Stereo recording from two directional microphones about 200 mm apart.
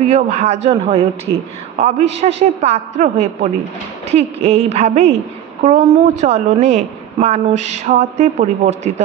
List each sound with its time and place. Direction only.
0.0 s a woman's voice: 35° right (ahead or behind)